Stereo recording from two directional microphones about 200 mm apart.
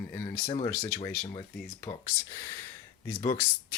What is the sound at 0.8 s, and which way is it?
Speech, 15° left (ahead or behind).